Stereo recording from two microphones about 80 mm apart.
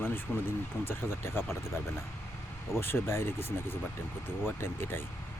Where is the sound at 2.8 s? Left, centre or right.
Left.